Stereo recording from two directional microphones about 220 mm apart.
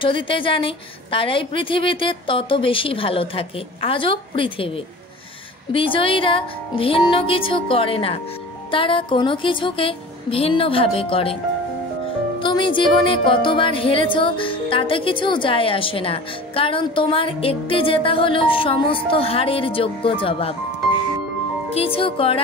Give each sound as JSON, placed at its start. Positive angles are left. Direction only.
{"t": 0.0, "sound": "speech", "side_deg": 25}
{"t": 12.4, "sound": "speech", "side_deg": 20}
{"t": 21.6, "sound": "speech", "side_deg": 25}